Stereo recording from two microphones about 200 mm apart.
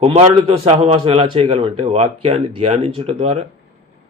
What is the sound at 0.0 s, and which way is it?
A man's voice, 30° right (ahead or behind).